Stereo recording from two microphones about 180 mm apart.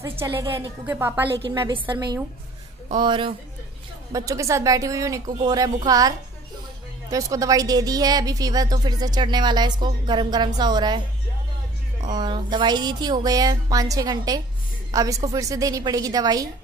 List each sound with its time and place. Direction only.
0.0 s a woman's voice: 15° right (ahead or behind)
0.3 s a woman's voice: 25° right (ahead or behind)
0.8 s a woman's voice: 10° right (ahead or behind)
1.5 s a woman's voice: 25° right (ahead or behind)
12.1 s a woman's voice: 25° right (ahead or behind)